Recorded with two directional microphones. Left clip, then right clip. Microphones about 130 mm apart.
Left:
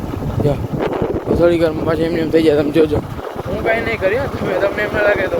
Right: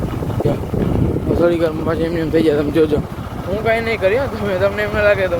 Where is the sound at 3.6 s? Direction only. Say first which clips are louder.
Even; 25° right (ahead or behind).